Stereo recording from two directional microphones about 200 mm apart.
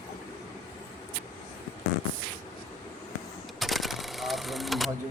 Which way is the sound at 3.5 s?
Centre (ahead or behind).